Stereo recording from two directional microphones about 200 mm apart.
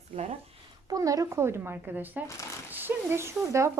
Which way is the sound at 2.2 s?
15° left (ahead or behind).